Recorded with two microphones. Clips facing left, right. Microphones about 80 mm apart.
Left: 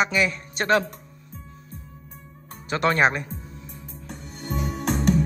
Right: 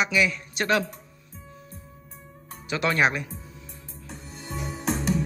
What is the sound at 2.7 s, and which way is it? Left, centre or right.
Speech, left.